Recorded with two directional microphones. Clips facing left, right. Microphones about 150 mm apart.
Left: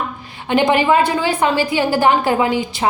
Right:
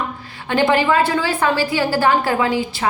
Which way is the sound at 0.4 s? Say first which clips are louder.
Left 2 dB; 15° left (ahead or behind).